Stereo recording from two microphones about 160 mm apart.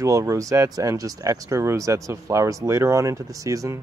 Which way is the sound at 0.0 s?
20° right (ahead or behind).